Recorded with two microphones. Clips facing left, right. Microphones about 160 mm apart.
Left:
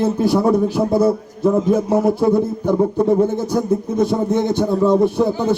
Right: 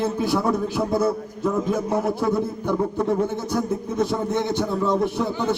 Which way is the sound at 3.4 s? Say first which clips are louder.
Left 6 dB; 15° left (ahead or behind).